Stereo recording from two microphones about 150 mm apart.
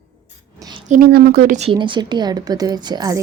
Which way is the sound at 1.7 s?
30° right (ahead or behind).